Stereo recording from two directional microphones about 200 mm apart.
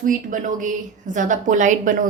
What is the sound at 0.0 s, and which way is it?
A woman's voice, 40° right (ahead or behind).